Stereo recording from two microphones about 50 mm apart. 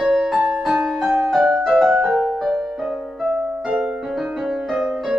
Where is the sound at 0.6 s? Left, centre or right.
Centre.